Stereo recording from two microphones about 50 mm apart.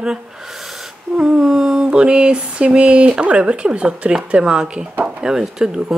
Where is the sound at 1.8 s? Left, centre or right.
Centre.